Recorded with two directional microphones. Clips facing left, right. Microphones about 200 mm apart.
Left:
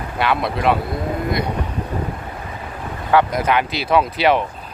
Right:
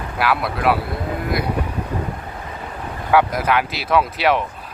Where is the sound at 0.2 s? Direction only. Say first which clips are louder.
Left 1 dB; 5° right (ahead or behind).